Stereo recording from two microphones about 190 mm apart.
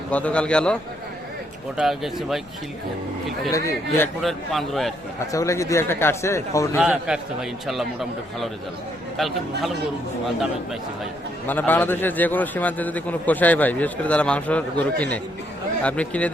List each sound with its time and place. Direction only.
0.1 s a man's voice: 5° left (ahead or behind)
3.5 s a man's voice: 15° left (ahead or behind)
4.2 s a man's voice: centre (ahead or behind)
5.3 s a man's voice: 15° left (ahead or behind)
6.7 s a man's voice: 5° right (ahead or behind)
9.1 s a man's voice: centre (ahead or behind)
11.4 s a man's voice: 10° left (ahead or behind)